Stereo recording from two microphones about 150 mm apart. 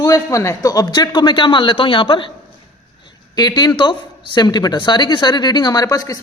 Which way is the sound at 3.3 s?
25° left (ahead or behind).